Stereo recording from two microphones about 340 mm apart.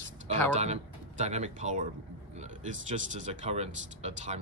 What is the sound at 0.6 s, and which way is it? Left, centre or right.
Speech, centre.